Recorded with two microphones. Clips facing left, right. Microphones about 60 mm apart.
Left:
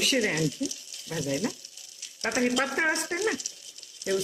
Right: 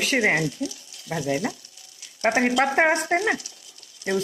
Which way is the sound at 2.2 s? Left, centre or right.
Right.